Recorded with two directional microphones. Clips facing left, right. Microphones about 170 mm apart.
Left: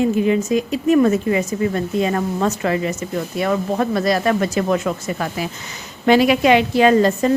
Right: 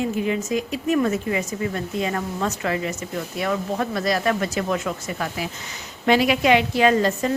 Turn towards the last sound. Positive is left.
turn(degrees=35)  # may be behind; listen again after turning